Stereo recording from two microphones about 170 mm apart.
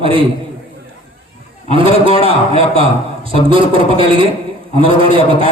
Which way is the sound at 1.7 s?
35° right (ahead or behind).